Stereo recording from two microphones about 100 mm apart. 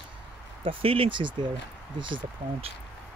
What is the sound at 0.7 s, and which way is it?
Speech, 65° right (ahead or behind).